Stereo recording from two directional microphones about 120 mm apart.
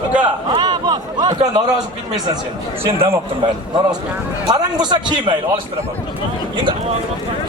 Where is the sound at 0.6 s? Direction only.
35° right (ahead or behind).